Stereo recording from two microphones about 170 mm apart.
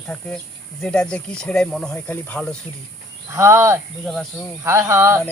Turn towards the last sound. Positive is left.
turn(degrees=-15)  # may be behind; listen again after turning